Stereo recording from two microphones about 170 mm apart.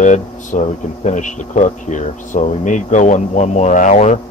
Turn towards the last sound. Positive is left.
turn(degrees=45)  # may be behind; listen again after turning